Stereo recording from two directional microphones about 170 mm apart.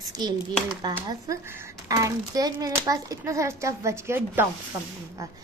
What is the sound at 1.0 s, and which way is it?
A woman's voice, 20° right (ahead or behind).